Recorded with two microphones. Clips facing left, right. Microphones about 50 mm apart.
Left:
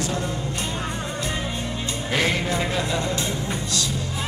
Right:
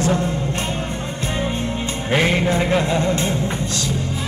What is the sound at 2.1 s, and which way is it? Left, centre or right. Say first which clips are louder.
Music: right 5 dB; right.